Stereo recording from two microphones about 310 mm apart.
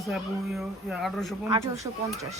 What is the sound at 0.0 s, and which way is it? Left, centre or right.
A woman's voice, centre.